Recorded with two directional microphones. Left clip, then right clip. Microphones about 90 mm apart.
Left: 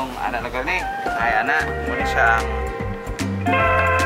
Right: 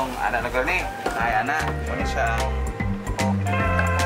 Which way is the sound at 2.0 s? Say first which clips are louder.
Left 8 dB; 25° left (ahead or behind).